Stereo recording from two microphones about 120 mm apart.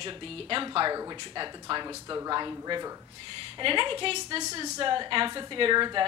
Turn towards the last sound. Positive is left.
turn(degrees=-40)  # may be behind; listen again after turning